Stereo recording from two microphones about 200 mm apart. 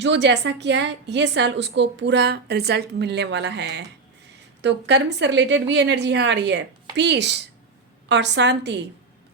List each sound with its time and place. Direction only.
0.0 s a woman's voice: 60° right (ahead or behind)